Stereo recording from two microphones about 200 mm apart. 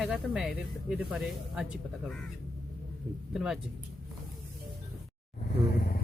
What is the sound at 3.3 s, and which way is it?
Speech, centre (ahead or behind).